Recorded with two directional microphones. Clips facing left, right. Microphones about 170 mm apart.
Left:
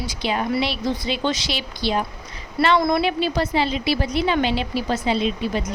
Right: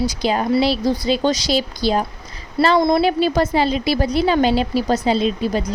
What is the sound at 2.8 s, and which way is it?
Speech, 25° right (ahead or behind).